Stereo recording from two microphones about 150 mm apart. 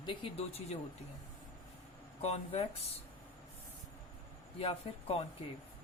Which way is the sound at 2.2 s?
45° left (ahead or behind).